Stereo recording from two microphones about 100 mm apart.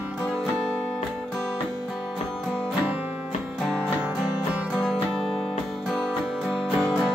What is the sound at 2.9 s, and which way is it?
Music, 15° right (ahead or behind).